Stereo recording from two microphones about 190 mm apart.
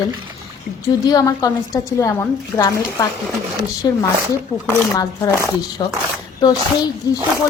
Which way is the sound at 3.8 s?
20° left (ahead or behind).